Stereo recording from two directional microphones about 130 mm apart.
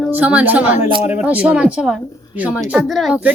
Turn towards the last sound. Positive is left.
turn(degrees=0)  # may be behind; listen again after turning